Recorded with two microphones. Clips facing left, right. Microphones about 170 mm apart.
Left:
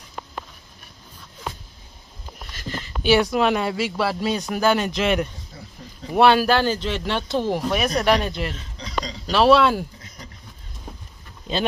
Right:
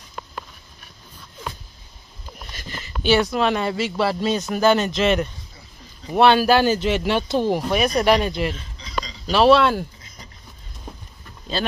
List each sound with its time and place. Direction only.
3.0 s speech: 10° left (ahead or behind)
6.4 s speech: 10° right (ahead or behind)
8.7 s a sound: 65° left (ahead or behind)
9.3 s speech: centre (ahead or behind)
11.5 s speech: 15° left (ahead or behind)